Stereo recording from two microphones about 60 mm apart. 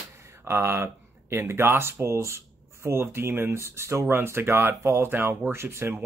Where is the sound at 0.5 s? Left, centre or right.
Right.